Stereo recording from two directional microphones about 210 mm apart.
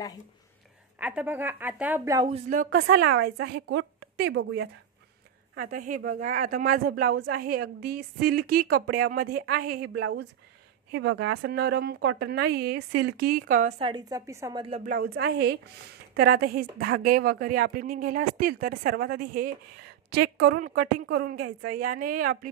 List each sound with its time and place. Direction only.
0.9 s a woman's voice: 5° right (ahead or behind)
2.2 s a woman's voice: 35° right (ahead or behind); by 4.6 s 75° right (ahead or behind)
5.6 s speech: 40° right (ahead or behind)
10.9 s speech: 60° right (ahead or behind); by 14.8 s 20° right (ahead or behind)
14.9 s speech: 45° right (ahead or behind)